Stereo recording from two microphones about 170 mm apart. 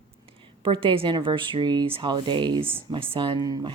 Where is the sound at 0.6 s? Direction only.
30° right (ahead or behind).